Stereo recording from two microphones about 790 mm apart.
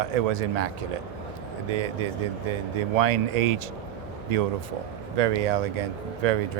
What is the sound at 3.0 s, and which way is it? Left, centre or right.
Speech, right.